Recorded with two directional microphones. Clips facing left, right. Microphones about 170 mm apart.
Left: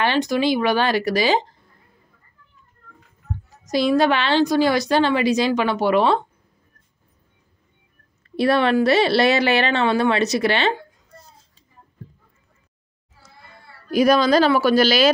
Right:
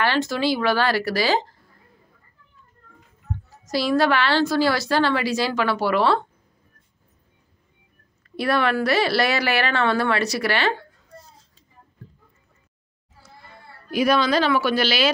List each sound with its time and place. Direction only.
0.0 s a woman's voice: 20° left (ahead or behind)
3.6 s a woman's voice: 20° left (ahead or behind)
8.4 s a woman's voice: 25° left (ahead or behind)
13.8 s speech: 40° left (ahead or behind)